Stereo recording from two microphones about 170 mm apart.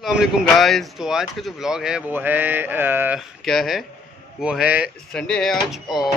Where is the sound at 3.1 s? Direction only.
Centre (ahead or behind).